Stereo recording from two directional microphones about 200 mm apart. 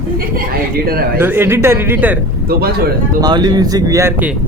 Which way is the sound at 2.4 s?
50° right (ahead or behind).